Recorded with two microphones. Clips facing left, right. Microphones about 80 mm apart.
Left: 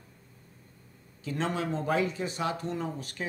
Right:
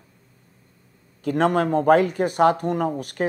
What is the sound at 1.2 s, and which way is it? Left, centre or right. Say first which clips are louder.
Speech: right 11 dB; right.